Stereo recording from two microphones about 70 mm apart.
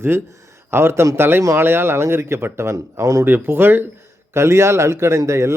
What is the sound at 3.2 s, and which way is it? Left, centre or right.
A man's voice, right.